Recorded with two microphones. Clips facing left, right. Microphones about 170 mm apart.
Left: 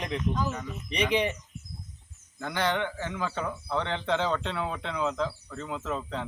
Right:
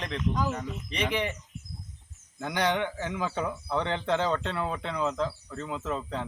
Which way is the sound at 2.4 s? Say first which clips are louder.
Right 1 dB; 5° right (ahead or behind).